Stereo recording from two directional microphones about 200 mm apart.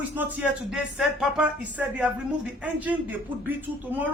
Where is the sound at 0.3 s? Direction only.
Centre (ahead or behind).